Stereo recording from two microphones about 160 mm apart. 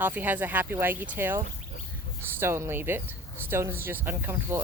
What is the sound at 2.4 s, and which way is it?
Speech, 15° right (ahead or behind).